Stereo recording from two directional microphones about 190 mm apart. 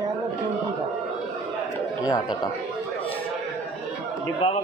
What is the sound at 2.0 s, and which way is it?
Speech, 20° left (ahead or behind).